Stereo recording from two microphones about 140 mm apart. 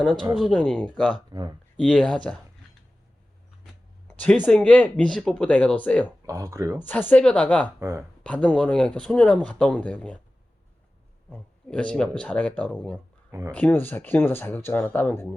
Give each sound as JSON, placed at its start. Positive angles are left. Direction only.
{"t": 0.3, "sound": "speech", "side_deg": 5}
{"t": 1.3, "sound": "speech", "side_deg": -30}
{"t": 1.7, "sound": "speech", "side_deg": 5}
{"t": 4.2, "sound": "speech", "side_deg": 10}
{"t": 6.2, "sound": "speech", "side_deg": -20}
{"t": 6.7, "sound": "speech", "side_deg": 10}
{"t": 7.8, "sound": "speech", "side_deg": -20}
{"t": 8.2, "sound": "speech", "side_deg": 10}
{"t": 11.3, "sound": "speech", "side_deg": 10}